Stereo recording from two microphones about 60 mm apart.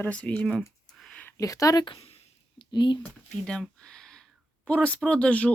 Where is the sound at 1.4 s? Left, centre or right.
Left.